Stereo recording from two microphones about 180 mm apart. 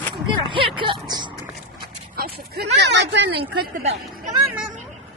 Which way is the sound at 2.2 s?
55° right (ahead or behind).